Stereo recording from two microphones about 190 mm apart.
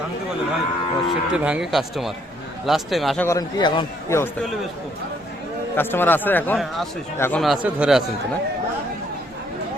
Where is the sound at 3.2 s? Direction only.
20° left (ahead or behind).